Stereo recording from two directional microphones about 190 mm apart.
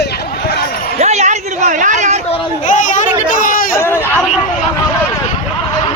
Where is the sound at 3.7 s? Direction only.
10° left (ahead or behind).